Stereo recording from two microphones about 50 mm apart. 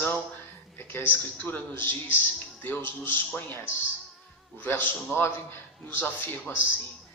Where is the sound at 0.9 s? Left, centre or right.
Left.